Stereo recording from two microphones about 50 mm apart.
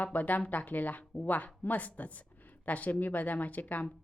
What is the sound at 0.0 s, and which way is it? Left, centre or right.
Speech, left.